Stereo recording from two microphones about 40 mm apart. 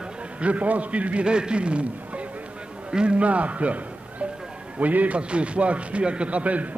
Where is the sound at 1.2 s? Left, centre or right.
Right.